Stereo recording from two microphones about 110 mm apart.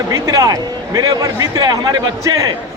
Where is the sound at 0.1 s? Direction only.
35° right (ahead or behind).